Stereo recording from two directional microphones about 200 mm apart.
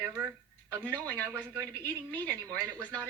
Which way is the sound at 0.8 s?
10° left (ahead or behind).